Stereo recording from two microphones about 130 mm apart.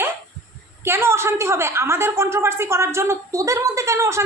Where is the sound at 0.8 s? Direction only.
20° right (ahead or behind).